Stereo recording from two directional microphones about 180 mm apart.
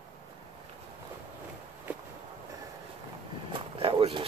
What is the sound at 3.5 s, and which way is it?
Vehicle, 30° right (ahead or behind).